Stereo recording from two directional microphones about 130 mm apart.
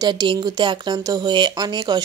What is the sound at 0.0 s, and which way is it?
Speech, 35° right (ahead or behind).